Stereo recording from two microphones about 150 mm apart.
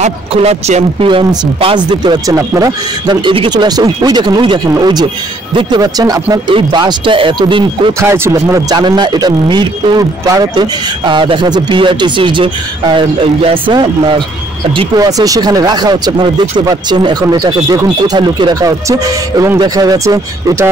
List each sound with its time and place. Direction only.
0.0 s speech: 45° right (ahead or behind)
8.0 s speech: 15° right (ahead or behind)